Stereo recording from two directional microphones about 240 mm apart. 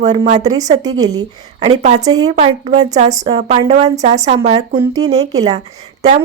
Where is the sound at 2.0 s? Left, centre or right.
Centre.